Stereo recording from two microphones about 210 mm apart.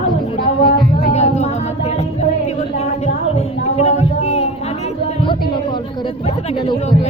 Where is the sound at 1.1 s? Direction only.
30° left (ahead or behind).